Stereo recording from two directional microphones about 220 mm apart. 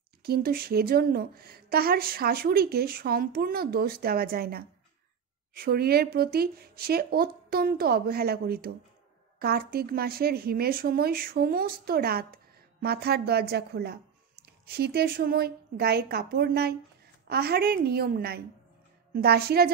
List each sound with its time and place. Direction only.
0.2 s a woman's voice: 45° right (ahead or behind)